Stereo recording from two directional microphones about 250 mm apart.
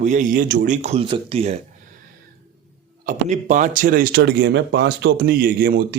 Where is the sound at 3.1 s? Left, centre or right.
Right.